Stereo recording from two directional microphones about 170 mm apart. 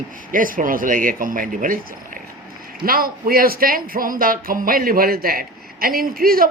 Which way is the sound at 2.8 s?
60° right (ahead or behind).